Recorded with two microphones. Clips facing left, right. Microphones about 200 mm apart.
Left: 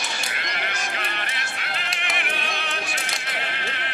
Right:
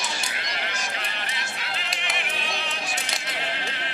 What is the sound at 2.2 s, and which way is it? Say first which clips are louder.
Opera: left 2 dB; 60° left (ahead or behind).